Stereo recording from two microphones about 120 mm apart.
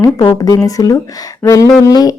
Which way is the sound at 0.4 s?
30° left (ahead or behind).